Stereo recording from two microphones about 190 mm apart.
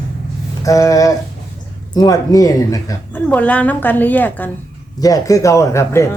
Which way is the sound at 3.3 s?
5° left (ahead or behind).